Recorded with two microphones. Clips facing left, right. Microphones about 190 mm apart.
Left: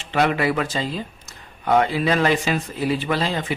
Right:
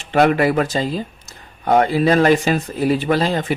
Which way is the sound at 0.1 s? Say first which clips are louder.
Right 5 dB; 45° right (ahead or behind).